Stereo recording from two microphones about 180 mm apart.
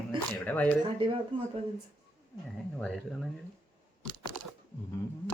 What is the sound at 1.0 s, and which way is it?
Speech, 30° right (ahead or behind).